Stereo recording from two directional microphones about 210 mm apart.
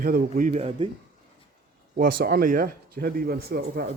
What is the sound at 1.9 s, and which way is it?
Speech, 45° right (ahead or behind).